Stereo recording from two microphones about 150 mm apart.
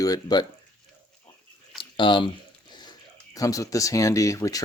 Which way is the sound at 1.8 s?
35° left (ahead or behind).